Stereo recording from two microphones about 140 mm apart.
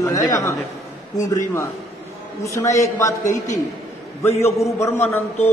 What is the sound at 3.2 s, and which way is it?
Speech, 60° left (ahead or behind).